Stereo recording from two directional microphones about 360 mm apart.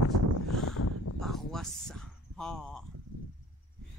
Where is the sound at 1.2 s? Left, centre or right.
Centre.